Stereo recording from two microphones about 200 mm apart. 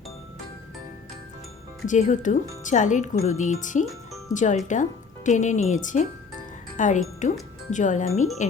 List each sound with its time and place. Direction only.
1.9 s speech: 35° left (ahead or behind)